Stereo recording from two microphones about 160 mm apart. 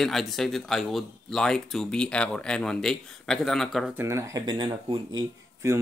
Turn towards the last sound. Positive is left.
turn(degrees=-20)  # may be behind; listen again after turning